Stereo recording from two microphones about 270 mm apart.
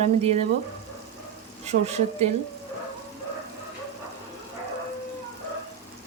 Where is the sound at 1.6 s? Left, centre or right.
Right.